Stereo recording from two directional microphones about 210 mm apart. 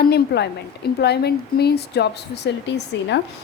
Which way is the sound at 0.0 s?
50° left (ahead or behind).